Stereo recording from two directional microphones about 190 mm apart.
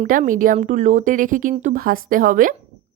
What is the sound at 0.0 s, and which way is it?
Speech, 45° right (ahead or behind).